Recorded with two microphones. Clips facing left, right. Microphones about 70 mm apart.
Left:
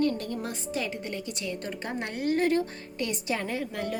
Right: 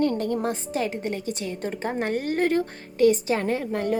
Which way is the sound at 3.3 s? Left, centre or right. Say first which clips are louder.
Right 6 dB; right.